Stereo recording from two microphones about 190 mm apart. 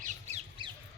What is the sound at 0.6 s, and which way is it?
Squawk, 25° right (ahead or behind).